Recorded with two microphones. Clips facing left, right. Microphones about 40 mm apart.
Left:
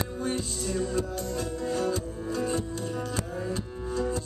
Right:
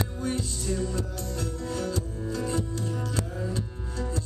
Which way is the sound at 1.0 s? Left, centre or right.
Left.